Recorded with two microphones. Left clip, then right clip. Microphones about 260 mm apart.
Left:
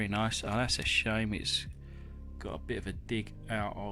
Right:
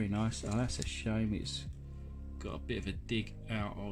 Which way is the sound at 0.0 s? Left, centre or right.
Left.